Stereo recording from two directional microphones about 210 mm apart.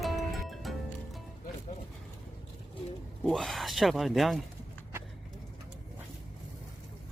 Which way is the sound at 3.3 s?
Centre (ahead or behind).